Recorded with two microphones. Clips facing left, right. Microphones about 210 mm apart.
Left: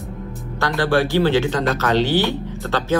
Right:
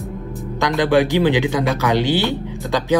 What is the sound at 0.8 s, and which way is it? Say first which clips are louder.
Speech: right 2 dB; 15° right (ahead or behind).